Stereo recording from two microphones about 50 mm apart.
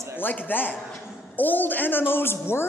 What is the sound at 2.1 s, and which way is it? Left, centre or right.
Speech, left.